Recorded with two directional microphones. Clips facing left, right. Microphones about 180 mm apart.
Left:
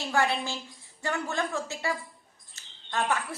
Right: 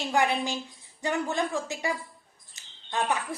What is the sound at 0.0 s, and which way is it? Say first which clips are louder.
A woman's voice: right 2 dB; 20° right (ahead or behind).